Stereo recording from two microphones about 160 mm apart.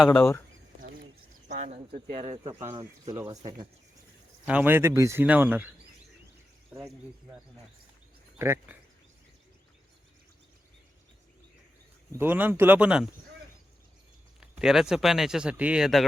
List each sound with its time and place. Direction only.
0.0 s speech: 10° left (ahead or behind)
1.5 s speech: 45° right (ahead or behind); by 3.7 s 30° right (ahead or behind)
4.4 s speech: 10° right (ahead or behind)
12.1 s speech: 15° right (ahead or behind)
14.4 s speech: 5° right (ahead or behind)